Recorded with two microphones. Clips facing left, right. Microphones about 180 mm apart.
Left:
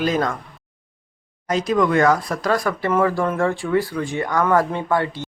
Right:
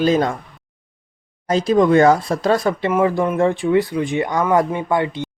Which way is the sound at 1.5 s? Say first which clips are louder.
Right 4 dB; 30° right (ahead or behind).